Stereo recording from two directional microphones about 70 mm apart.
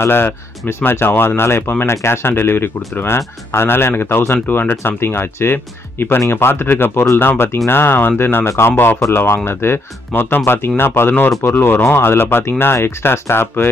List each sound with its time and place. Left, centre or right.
0.0 s speech: left